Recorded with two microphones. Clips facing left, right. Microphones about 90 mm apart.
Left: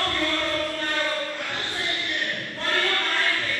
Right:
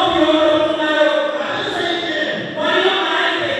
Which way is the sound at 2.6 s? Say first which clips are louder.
Right 10 dB; 50° right (ahead or behind).